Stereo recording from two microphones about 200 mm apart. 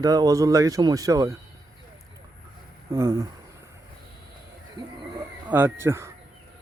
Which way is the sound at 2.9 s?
15° right (ahead or behind).